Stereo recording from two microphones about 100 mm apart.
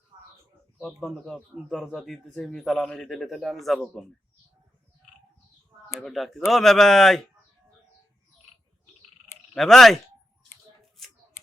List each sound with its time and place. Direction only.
0.9 s a man's voice: centre (ahead or behind)
6.1 s a man's voice: centre (ahead or behind)
9.6 s a man's voice: 5° left (ahead or behind)